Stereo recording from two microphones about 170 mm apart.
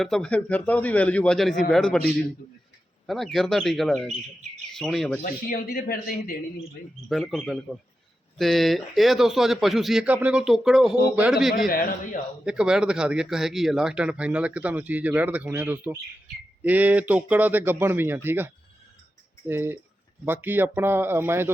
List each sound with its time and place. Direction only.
0.0 s a man's voice: 5° left (ahead or behind)
5.2 s a man's voice: 60° left (ahead or behind)
7.1 s speech: centre (ahead or behind)